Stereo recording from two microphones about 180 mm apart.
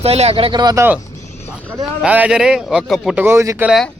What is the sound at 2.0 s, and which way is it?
A man's voice, 5° right (ahead or behind).